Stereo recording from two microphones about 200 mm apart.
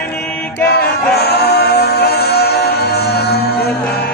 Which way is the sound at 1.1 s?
55° left (ahead or behind).